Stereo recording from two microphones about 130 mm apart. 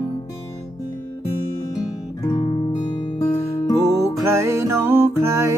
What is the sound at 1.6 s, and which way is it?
Music, 30° left (ahead or behind).